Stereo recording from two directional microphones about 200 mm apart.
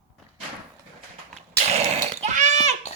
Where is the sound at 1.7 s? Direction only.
30° right (ahead or behind).